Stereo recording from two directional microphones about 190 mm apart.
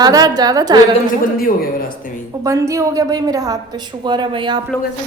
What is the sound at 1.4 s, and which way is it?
Speech, 50° left (ahead or behind).